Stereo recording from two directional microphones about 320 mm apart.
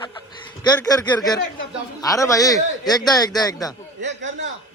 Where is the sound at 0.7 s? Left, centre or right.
Centre.